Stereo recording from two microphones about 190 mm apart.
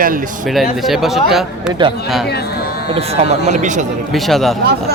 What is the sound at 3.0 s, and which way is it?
Speech, 35° right (ahead or behind).